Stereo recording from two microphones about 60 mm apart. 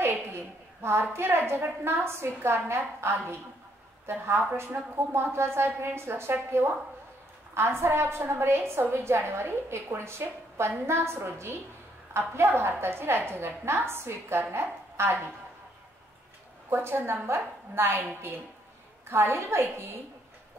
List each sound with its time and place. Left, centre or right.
0.0 s a sound: right
1.1 s a woman's voice: right
16.7 s a woman's voice: right